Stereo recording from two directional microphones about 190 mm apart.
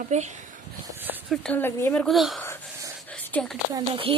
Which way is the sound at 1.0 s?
10° right (ahead or behind).